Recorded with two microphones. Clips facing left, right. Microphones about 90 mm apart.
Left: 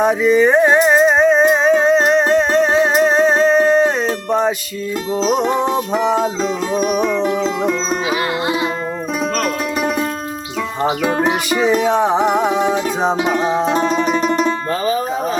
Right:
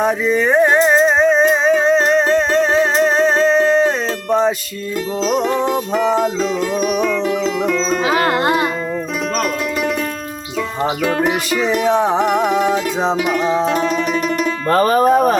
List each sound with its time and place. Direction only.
0.0 s music: 5° left (ahead or behind)
5.2 s music: 20° left (ahead or behind)
6.4 s music: 25° left (ahead or behind)
8.1 s music: 55° right (ahead or behind)
11.0 s music: 20° left (ahead or behind)
11.8 s music: centre (ahead or behind)
13.1 s music: 25° left (ahead or behind)
14.7 s music: 60° right (ahead or behind)